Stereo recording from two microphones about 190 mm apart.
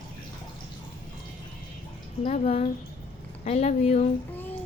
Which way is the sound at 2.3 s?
35° left (ahead or behind).